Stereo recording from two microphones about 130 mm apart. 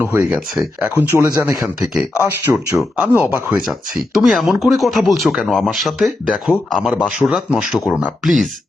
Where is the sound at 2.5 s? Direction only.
15° right (ahead or behind).